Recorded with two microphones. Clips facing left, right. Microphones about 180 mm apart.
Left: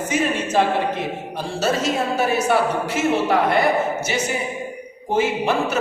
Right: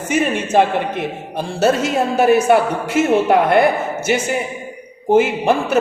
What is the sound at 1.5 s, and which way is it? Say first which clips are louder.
Speech: right 5 dB; 55° right (ahead or behind).